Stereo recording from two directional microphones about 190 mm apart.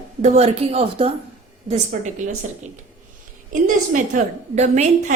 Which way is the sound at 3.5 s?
40° right (ahead or behind).